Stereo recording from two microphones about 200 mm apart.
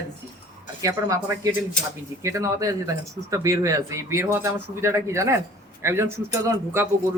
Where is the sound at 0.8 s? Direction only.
15° right (ahead or behind).